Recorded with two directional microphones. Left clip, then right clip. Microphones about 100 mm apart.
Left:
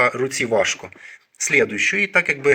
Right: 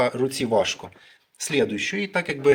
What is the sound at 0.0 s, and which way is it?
Speech, centre (ahead or behind).